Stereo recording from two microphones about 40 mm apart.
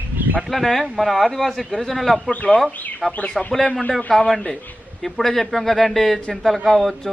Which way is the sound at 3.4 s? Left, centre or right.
Centre.